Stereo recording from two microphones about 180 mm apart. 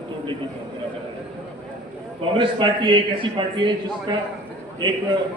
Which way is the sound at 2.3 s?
25° right (ahead or behind).